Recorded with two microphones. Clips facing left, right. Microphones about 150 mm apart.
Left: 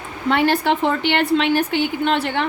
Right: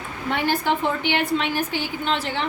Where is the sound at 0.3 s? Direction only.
70° left (ahead or behind).